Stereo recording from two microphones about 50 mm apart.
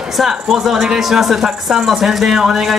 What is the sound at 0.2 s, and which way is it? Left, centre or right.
Speech, centre.